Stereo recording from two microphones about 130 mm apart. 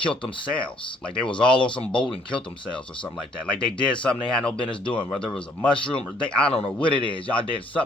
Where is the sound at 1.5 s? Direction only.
40° left (ahead or behind).